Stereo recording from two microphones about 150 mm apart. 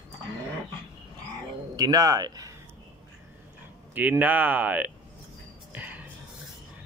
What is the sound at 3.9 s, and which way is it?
Speech, 10° right (ahead or behind).